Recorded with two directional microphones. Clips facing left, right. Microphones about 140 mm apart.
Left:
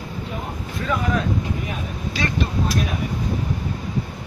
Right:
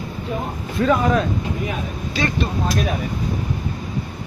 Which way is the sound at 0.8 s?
45° right (ahead or behind).